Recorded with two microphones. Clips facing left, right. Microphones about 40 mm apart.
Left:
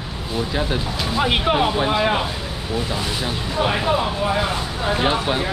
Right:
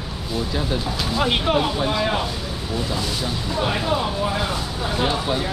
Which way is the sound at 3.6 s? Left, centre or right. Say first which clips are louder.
Left 3 dB; left.